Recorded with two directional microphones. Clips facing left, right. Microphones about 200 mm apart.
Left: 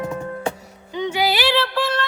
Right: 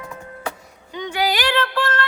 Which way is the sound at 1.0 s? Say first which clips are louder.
Left 2 dB; 10° left (ahead or behind).